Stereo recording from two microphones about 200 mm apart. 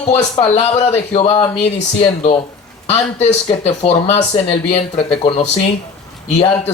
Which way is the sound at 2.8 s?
30° left (ahead or behind).